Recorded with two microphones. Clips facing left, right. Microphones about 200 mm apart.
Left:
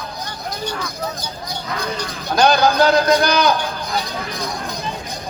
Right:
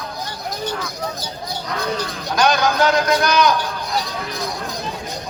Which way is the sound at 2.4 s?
35° left (ahead or behind).